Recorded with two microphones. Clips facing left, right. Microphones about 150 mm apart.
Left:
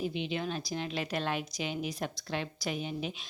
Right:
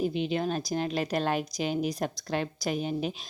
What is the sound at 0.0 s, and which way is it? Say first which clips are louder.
A woman's voice: right 6 dB; 40° right (ahead or behind).